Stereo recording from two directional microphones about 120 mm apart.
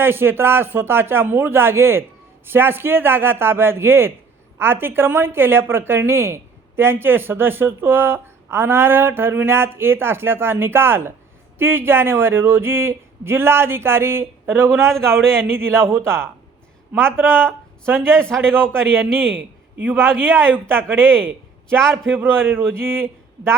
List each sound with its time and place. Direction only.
0.0 s a woman's voice: 20° right (ahead or behind)
18.2 s a man's voice: 5° left (ahead or behind)
18.4 s a woman's voice: 20° right (ahead or behind)
21.8 s a man's voice: 5° left (ahead or behind)
22.1 s a woman's voice: 20° right (ahead or behind)